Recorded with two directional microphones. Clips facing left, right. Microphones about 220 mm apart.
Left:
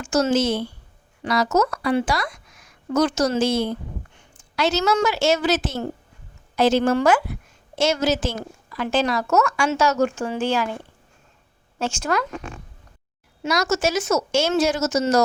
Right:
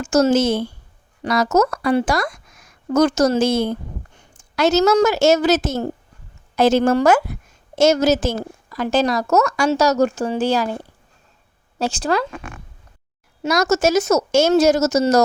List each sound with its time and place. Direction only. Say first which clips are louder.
0.0 s a woman's voice: right 4 dB; 45° right (ahead or behind)
13.4 s speech: right 4 dB; 45° right (ahead or behind)